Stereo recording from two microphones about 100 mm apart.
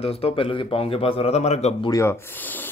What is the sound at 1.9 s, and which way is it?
Speech, 25° left (ahead or behind).